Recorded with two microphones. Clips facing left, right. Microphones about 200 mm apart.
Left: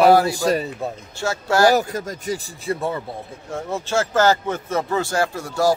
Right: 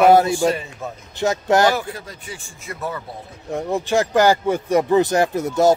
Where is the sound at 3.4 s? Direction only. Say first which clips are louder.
Right 5 dB; 15° right (ahead or behind).